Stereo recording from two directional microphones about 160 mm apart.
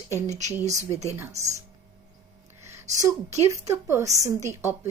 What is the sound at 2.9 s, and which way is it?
Speech, 45° right (ahead or behind).